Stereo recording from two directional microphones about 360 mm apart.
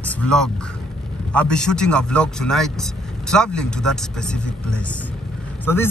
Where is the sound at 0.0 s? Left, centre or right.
Centre.